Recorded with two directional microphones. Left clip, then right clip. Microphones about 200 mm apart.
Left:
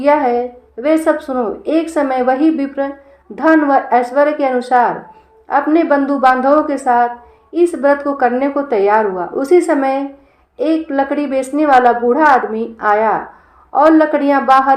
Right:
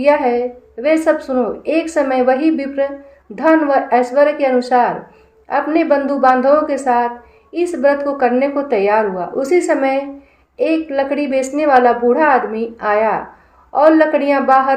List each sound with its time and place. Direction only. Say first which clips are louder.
0.0 s a woman's voice: left 1 dB; 25° left (ahead or behind)